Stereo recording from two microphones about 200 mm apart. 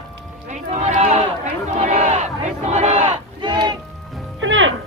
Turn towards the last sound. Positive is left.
turn(degrees=-70)  # may be behind; listen again after turning